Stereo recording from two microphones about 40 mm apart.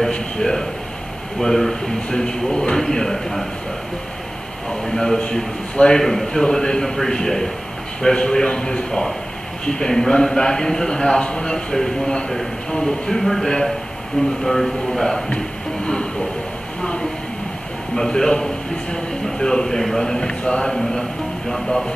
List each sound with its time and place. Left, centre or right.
0.4 s a man's voice: centre
2.0 s a man's voice: left
4.6 s a man's voice: centre
13.2 s a man's voice: centre
15.2 s a sound: left
17.9 s a man's voice: centre
21.5 s a man's voice: centre